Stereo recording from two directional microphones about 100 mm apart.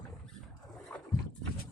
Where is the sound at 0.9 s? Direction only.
20° left (ahead or behind).